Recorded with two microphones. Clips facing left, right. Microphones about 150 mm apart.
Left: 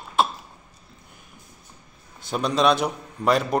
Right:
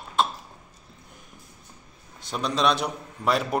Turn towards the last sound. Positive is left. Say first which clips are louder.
# left 3 dB
turn(degrees=0)  # may be behind; listen again after turning